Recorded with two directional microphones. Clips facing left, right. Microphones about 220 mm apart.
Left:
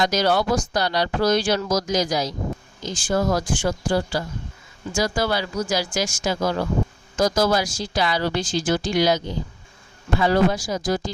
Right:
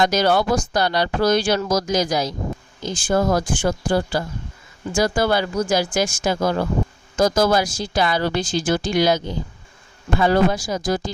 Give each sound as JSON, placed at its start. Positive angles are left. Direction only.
{"t": 0.0, "sound": "speech", "side_deg": -55}